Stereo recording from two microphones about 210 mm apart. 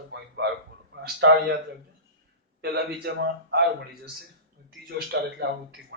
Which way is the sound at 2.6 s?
50° right (ahead or behind).